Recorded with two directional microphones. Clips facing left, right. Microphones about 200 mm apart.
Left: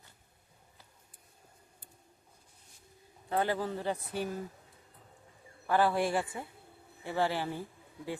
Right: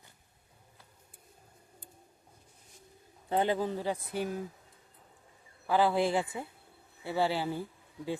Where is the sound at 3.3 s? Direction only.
20° right (ahead or behind).